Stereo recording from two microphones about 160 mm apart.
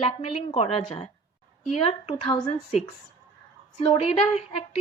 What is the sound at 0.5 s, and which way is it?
A woman's voice, 40° left (ahead or behind).